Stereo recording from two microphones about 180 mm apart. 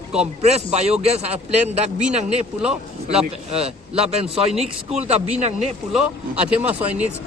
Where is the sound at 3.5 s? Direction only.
35° right (ahead or behind).